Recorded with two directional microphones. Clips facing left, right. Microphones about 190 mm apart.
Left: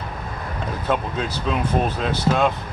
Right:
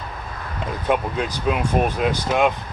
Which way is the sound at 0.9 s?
15° right (ahead or behind).